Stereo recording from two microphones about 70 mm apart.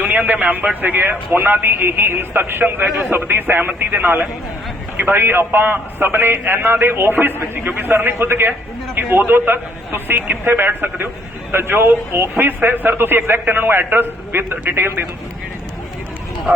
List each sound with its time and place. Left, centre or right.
0.0 s a man's voice: right